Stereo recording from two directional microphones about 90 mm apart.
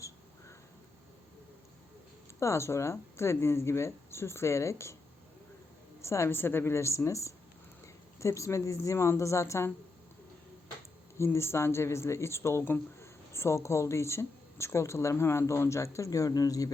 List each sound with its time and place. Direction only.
2.4 s speech: 30° left (ahead or behind)
6.0 s speech: 30° left (ahead or behind)
11.2 s speech: 30° left (ahead or behind)